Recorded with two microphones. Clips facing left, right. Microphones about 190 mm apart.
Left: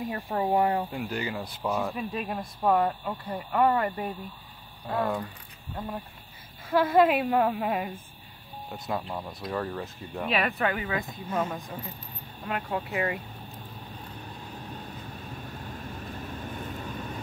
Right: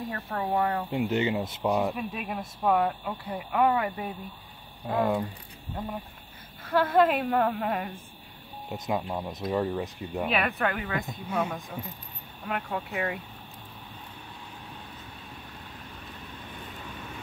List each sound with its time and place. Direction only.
0.1 s speech: 20° left (ahead or behind)
0.9 s speech: 25° right (ahead or behind)
2.0 s speech: 5° right (ahead or behind)
4.8 s speech: 15° right (ahead or behind)
6.6 s a woman's voice: 10° left (ahead or behind)
8.6 s speech: 20° right (ahead or behind)
10.2 s speech: centre (ahead or behind)
16.3 s vehicle: 40° left (ahead or behind)